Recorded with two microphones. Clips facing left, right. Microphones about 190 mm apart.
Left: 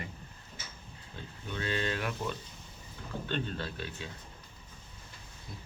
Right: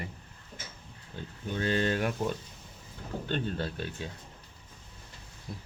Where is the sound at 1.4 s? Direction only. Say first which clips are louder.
Right 5 dB; 40° right (ahead or behind).